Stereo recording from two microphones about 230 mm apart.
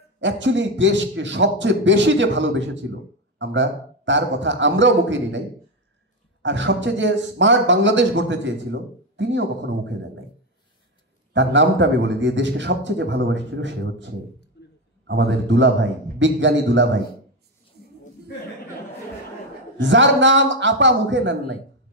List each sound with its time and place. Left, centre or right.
0.2 s speech: right
6.4 s speech: right
11.3 s speech: right
14.6 s a sound: left
15.0 s speech: right
19.8 s speech: right